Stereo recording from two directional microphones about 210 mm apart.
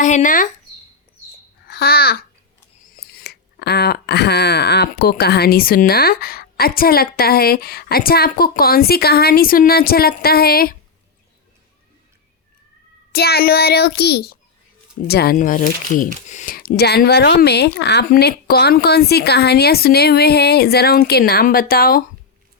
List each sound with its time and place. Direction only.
0.0 s speech: 35° left (ahead or behind)
1.6 s a child's voice: 50° left (ahead or behind)
13.1 s speech: 50° left (ahead or behind)